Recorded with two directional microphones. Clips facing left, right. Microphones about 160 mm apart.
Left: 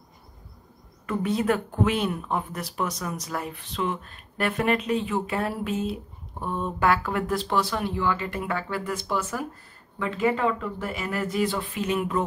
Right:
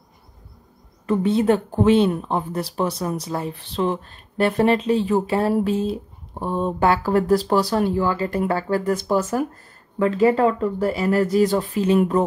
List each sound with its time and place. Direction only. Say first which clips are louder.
1.0 s speech: right 6 dB; 30° right (ahead or behind)